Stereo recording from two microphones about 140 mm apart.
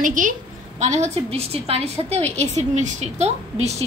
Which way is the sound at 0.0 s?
70° right (ahead or behind).